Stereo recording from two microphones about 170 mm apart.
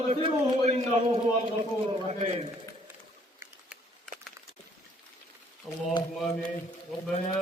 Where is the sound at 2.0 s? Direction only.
35° right (ahead or behind).